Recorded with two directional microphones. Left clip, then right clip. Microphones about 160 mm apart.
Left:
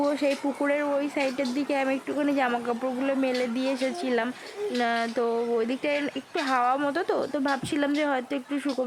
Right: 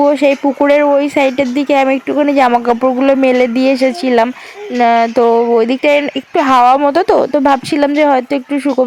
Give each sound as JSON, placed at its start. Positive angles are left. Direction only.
{"t": 0.0, "sound": "speech", "side_deg": -40}